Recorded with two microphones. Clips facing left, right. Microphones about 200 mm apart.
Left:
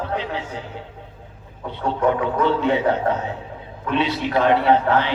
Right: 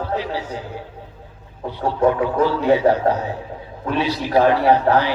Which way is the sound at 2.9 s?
25° left (ahead or behind).